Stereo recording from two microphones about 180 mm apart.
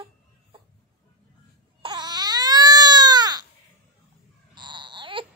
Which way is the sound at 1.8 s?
25° right (ahead or behind).